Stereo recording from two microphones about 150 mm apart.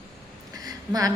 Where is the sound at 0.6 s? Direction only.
25° right (ahead or behind).